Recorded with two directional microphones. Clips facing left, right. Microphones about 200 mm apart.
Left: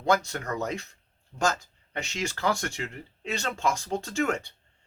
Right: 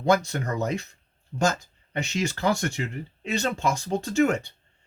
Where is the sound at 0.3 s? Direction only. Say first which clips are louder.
Right 3 dB; 20° right (ahead or behind).